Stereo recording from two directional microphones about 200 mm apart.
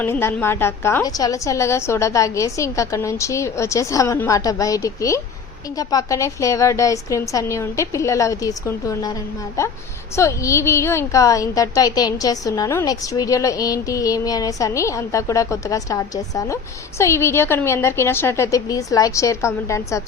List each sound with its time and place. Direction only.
0.0 s a woman's voice: 10° left (ahead or behind)
10.2 s a woman's voice: 15° left (ahead or behind)